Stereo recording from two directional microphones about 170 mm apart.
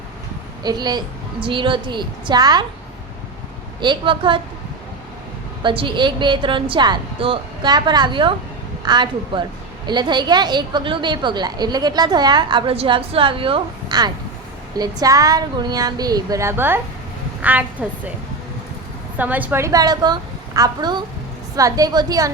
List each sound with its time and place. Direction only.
0.6 s a woman's voice: 25° right (ahead or behind)
3.8 s a woman's voice: 30° right (ahead or behind)
5.6 s a woman's voice: 30° right (ahead or behind); by 18.1 s 10° right (ahead or behind)
19.1 s a woman's voice: 10° right (ahead or behind)